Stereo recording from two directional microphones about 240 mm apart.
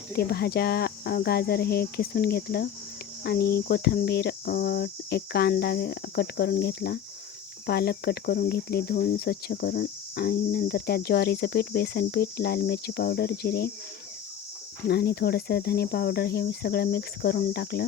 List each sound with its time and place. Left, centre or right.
0.2 s cricket: left
14.8 s cricket: left